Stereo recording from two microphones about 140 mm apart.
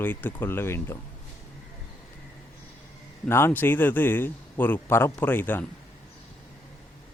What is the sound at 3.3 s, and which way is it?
Speech, 15° left (ahead or behind).